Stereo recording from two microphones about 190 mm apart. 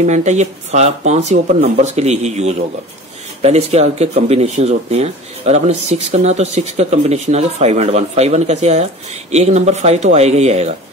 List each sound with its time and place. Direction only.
0.0 s speech: 40° right (ahead or behind)